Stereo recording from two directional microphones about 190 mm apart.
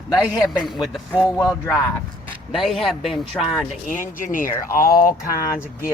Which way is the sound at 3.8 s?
45° left (ahead or behind).